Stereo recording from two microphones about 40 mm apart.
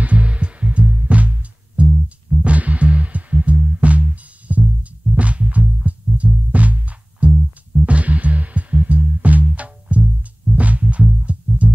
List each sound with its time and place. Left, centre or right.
0.0 s music: right